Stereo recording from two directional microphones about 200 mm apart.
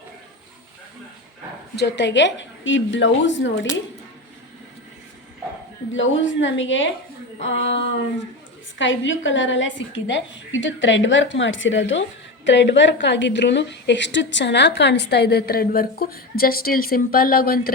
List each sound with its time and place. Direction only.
1.7 s a woman's voice: 60° left (ahead or behind)
5.9 s a woman's voice: 70° left (ahead or behind); by 17.7 s 50° left (ahead or behind)